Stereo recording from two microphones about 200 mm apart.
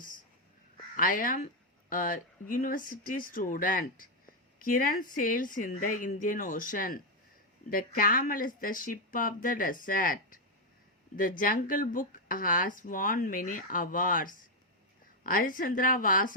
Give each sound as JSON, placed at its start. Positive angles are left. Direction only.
{"t": 0.9, "sound": "speech", "side_deg": 45}